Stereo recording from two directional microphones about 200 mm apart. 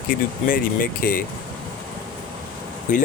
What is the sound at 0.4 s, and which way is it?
Speech, 45° left (ahead or behind).